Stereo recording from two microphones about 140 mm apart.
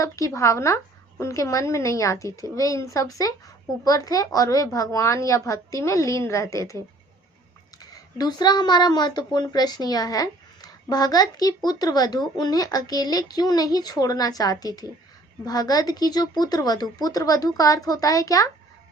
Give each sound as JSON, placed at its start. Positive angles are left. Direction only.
{"t": 0.0, "sound": "speech", "side_deg": 20}